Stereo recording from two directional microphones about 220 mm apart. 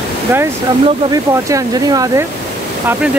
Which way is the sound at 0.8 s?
15° right (ahead or behind).